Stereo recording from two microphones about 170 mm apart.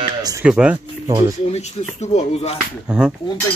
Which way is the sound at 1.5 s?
40° left (ahead or behind).